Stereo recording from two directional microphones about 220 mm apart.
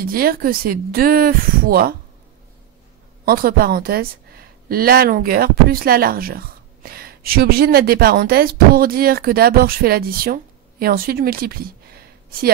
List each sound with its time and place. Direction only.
0.0 s speech: 40° right (ahead or behind)
3.3 s a woman's voice: 40° right (ahead or behind)